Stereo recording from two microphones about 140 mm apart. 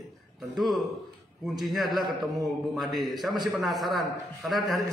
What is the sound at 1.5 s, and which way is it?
A man's voice, centre (ahead or behind).